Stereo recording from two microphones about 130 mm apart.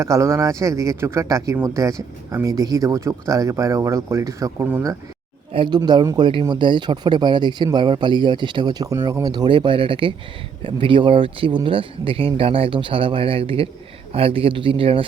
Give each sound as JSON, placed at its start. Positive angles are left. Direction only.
{"t": 0.0, "sound": "speech", "side_deg": -20}
{"t": 5.5, "sound": "a man's voice", "side_deg": -35}